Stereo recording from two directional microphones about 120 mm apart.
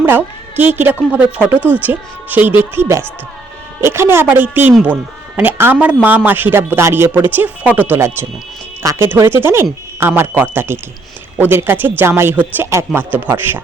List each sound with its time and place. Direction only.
0.0 s a woman's voice: 15° right (ahead or behind)